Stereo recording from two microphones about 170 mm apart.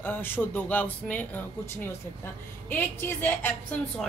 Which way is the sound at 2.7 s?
10° left (ahead or behind).